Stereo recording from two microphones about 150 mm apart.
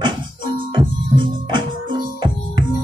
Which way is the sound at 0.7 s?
30° right (ahead or behind).